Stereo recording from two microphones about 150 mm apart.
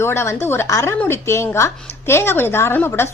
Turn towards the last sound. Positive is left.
turn(degrees=15)  # may be behind; listen again after turning